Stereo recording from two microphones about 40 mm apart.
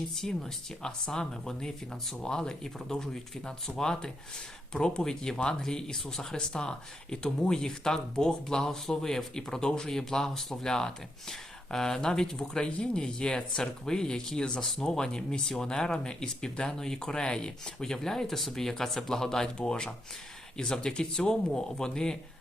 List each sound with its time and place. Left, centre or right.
0.2 s speech: centre
0.8 s speech: centre